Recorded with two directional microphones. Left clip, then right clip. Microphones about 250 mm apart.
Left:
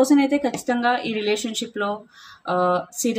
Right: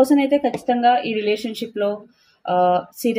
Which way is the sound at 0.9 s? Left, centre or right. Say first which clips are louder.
Right 3 dB; centre.